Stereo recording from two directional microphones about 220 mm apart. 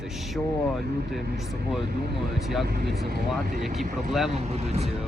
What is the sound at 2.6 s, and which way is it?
Speech, 45° right (ahead or behind).